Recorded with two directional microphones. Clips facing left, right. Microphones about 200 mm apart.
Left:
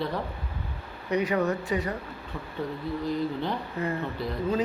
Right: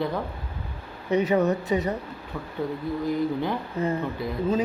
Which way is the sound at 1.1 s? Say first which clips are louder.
Right 4 dB; 20° right (ahead or behind).